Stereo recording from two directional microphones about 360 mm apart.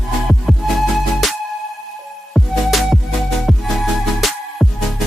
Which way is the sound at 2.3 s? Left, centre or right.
Centre.